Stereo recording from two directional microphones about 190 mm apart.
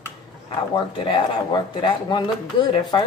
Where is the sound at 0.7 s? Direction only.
25° left (ahead or behind).